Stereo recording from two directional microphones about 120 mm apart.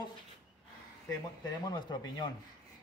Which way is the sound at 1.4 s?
35° left (ahead or behind).